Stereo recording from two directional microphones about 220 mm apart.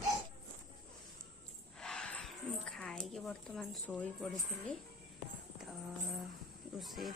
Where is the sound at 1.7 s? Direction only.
5° left (ahead or behind).